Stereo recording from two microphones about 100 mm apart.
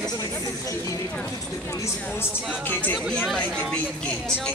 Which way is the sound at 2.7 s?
20° left (ahead or behind).